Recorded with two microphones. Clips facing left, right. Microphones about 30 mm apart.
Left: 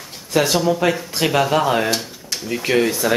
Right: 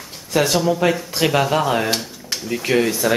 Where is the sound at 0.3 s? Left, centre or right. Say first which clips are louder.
Even; centre.